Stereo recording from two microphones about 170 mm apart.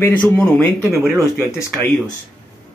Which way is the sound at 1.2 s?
15° left (ahead or behind).